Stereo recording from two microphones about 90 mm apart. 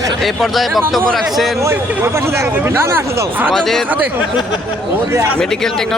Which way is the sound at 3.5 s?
5° left (ahead or behind).